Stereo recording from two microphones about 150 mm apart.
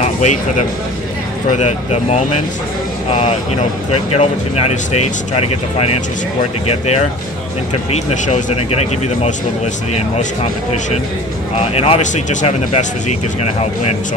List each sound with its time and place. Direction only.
0.0 s speech: 50° left (ahead or behind)
7.9 s speech: 50° left (ahead or behind)
11.6 s speech: 40° left (ahead or behind)